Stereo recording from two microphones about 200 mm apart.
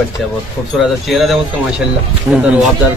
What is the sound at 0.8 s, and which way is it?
Speech, centre (ahead or behind).